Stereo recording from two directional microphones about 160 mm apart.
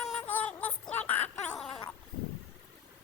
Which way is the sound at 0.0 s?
5° left (ahead or behind).